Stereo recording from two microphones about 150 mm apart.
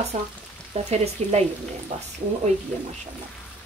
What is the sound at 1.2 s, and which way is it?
Speech, 45° right (ahead or behind).